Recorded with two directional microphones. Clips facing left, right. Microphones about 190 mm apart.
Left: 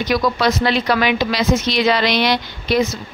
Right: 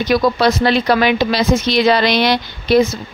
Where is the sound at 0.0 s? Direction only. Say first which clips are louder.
Right 3 dB; 30° right (ahead or behind).